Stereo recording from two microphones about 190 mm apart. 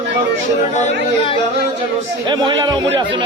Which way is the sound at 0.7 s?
40° left (ahead or behind).